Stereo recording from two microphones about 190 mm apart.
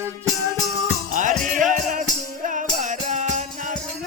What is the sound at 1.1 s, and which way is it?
Music, 40° right (ahead or behind).